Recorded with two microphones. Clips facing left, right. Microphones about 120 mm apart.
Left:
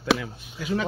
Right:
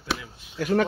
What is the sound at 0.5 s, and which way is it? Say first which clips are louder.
Speech: right 5 dB; 55° right (ahead or behind).